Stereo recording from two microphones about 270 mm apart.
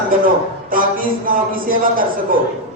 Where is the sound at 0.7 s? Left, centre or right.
Right.